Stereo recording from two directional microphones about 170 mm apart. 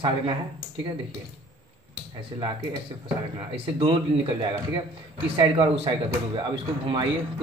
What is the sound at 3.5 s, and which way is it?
A man's voice, 30° right (ahead or behind).